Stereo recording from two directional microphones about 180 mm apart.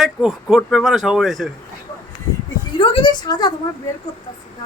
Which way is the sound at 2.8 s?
25° left (ahead or behind).